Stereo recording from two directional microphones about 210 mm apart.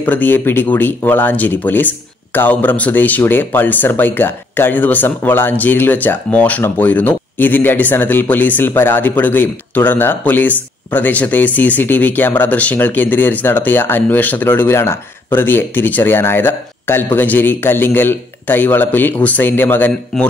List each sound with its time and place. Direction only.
0.0 s speech: 10° left (ahead or behind)